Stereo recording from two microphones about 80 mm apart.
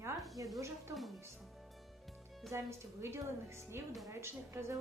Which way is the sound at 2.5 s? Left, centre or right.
Right.